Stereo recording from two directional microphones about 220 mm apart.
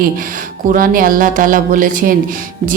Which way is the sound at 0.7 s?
40° right (ahead or behind).